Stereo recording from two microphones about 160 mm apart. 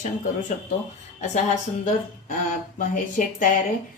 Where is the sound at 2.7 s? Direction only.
55° left (ahead or behind).